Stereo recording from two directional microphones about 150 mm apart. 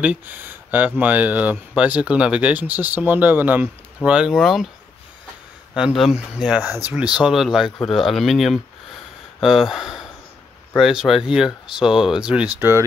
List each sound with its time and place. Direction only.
0.0 s speech: 10° right (ahead or behind)
5.8 s speech: 5° right (ahead or behind)
12.5 s speech: 15° right (ahead or behind)